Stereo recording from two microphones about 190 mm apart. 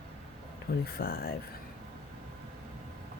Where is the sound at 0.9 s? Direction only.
50° left (ahead or behind).